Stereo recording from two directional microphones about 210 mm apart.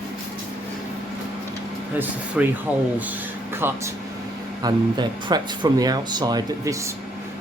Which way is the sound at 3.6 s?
10° right (ahead or behind).